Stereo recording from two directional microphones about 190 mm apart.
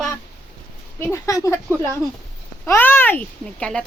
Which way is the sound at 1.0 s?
15° left (ahead or behind).